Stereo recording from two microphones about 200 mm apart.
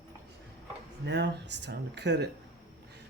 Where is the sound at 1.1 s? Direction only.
60° right (ahead or behind).